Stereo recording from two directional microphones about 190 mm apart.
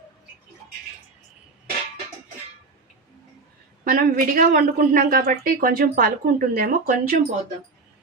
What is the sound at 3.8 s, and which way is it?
Speech, 45° right (ahead or behind).